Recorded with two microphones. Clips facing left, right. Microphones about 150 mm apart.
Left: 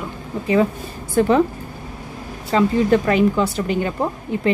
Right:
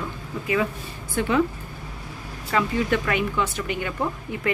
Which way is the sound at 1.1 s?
40° left (ahead or behind).